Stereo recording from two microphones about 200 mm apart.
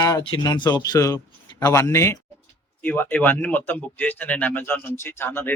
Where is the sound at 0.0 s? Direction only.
20° left (ahead or behind).